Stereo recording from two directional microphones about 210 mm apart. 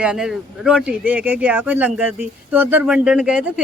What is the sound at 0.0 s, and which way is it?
Speech, 5° right (ahead or behind).